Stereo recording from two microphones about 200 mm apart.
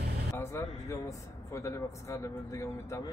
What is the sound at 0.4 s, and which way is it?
A man's voice, 15° left (ahead or behind).